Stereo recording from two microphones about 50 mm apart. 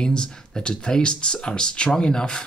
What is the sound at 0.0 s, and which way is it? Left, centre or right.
Speech, centre.